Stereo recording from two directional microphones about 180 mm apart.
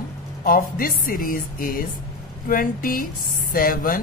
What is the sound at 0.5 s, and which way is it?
A woman's voice, 50° left (ahead or behind).